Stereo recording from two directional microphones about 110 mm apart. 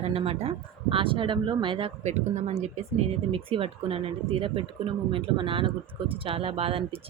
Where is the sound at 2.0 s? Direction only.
90° right.